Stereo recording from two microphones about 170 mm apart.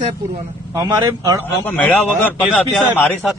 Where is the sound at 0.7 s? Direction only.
25° right (ahead or behind).